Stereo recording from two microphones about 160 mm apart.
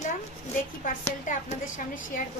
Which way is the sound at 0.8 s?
50° left (ahead or behind).